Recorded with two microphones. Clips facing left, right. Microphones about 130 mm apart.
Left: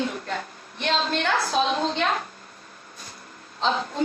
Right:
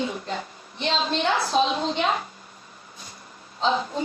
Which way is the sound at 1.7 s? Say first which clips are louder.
Even; centre (ahead or behind).